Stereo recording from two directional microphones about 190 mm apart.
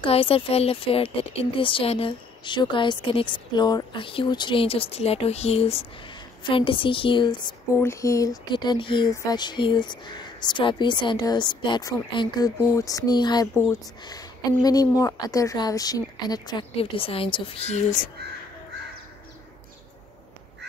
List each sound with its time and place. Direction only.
0.0 s speech: 30° left (ahead or behind)